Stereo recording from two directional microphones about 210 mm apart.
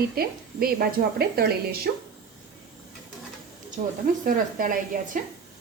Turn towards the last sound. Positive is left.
turn(degrees=-40)  # may be behind; listen again after turning